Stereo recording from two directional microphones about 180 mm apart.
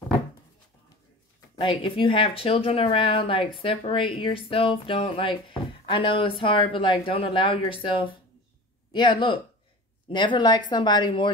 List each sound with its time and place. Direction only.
1.6 s speech: 30° left (ahead or behind)